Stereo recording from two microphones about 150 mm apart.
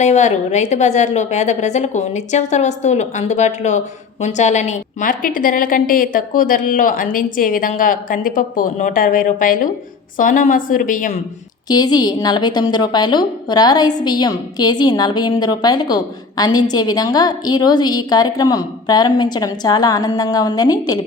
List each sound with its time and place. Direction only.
0.0 s a woman's voice: 50° left (ahead or behind)
11.7 s a woman's voice: 25° left (ahead or behind)